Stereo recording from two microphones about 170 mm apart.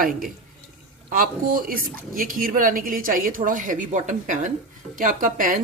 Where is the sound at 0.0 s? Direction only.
55° right (ahead or behind).